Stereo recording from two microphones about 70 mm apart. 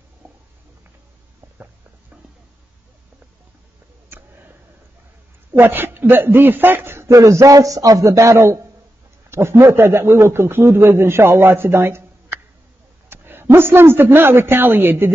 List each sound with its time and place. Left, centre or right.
4.1 s a sound: right
5.5 s speech: right
7.2 s speech: right